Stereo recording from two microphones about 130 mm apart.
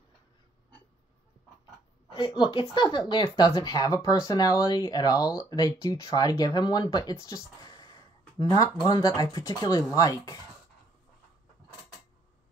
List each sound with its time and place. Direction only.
2.1 s speech: 35° left (ahead or behind)